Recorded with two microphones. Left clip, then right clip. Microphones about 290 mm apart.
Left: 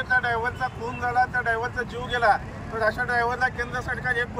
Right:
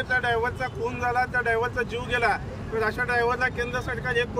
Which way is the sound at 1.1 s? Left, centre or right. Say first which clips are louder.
Left 2 dB; centre.